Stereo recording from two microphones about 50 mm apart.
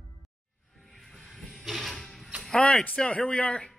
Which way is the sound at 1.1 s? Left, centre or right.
Centre.